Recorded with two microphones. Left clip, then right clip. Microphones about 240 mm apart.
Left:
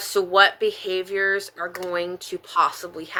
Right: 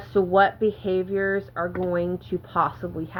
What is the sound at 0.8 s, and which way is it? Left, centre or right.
Speech, left.